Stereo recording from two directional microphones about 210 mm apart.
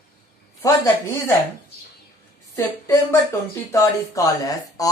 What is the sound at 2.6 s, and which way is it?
Speech, 15° left (ahead or behind).